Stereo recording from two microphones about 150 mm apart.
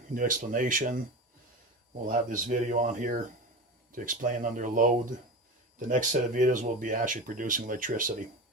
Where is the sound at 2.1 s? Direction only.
60° right (ahead or behind).